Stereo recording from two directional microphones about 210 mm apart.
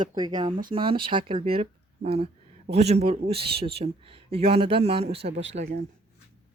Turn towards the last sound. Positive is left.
turn(degrees=-30)  # may be behind; listen again after turning